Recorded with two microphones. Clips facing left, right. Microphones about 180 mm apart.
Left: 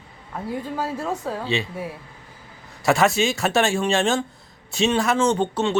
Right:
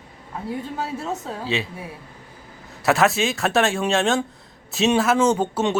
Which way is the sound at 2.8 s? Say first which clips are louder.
Even; centre (ahead or behind).